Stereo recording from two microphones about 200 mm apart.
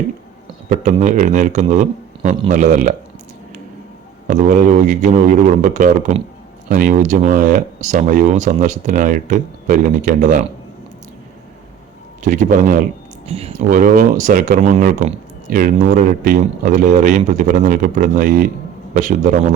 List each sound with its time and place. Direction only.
0.7 s speech: 35° right (ahead or behind)
4.3 s speech: 40° right (ahead or behind)
12.2 s a man's voice: 40° right (ahead or behind)
13.2 s speech: 30° right (ahead or behind)
13.7 s speech: 45° right (ahead or behind)